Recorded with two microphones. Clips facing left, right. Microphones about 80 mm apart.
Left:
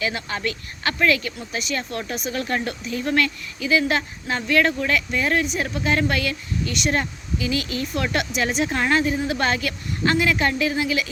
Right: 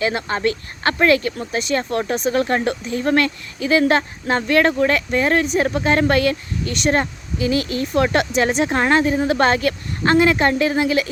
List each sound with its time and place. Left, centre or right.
0.0 s speech: right